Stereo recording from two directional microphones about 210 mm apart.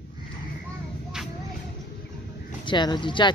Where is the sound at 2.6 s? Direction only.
20° left (ahead or behind).